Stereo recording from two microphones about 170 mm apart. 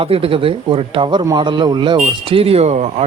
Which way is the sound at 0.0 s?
35° right (ahead or behind).